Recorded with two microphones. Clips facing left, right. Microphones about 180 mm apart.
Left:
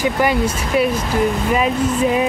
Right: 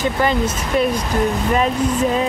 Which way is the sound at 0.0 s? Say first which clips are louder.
Left 1 dB; 10° left (ahead or behind).